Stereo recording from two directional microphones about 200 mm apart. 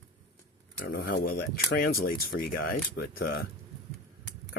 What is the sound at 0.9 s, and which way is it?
Speech, 50° left (ahead or behind).